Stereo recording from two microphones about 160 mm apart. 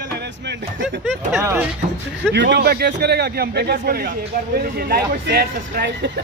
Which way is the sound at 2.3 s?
90° right.